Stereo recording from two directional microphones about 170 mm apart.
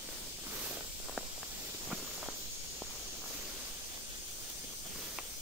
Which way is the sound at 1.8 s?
5° right (ahead or behind).